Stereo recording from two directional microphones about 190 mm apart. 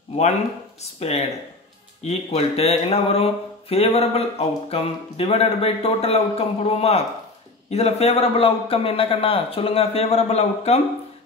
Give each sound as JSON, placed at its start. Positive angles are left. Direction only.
{"t": 0.9, "sound": "speech", "side_deg": 35}